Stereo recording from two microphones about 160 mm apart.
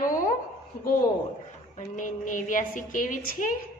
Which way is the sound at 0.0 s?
60° left (ahead or behind).